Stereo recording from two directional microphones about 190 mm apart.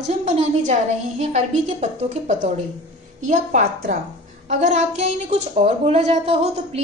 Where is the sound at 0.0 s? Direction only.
35° right (ahead or behind).